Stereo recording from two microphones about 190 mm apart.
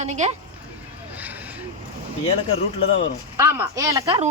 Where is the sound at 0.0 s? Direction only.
35° right (ahead or behind).